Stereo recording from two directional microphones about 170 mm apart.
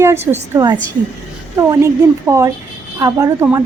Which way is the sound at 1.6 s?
15° right (ahead or behind).